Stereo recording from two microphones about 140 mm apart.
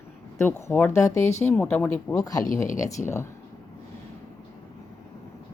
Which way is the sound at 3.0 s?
20° left (ahead or behind).